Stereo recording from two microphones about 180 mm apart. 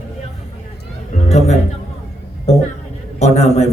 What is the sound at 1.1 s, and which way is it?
Music, 40° left (ahead or behind).